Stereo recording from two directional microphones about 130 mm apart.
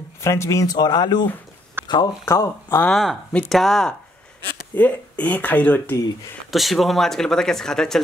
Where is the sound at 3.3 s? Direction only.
Centre (ahead or behind).